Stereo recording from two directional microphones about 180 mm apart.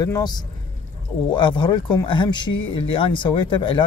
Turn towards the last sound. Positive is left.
turn(degrees=25)  # may be behind; listen again after turning